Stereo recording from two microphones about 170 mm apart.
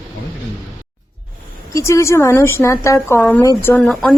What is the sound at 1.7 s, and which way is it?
A woman's voice, 15° left (ahead or behind).